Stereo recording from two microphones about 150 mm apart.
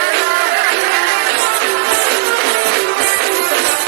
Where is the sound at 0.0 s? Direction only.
90° right.